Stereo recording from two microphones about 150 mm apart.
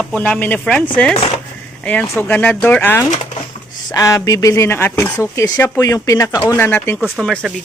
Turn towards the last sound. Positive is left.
turn(degrees=5)  # may be behind; listen again after turning